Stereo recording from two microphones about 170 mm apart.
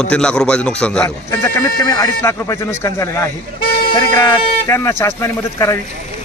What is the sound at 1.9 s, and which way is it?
Speech, 15° left (ahead or behind).